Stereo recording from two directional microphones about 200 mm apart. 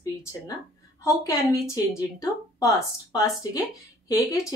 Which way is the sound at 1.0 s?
15° left (ahead or behind).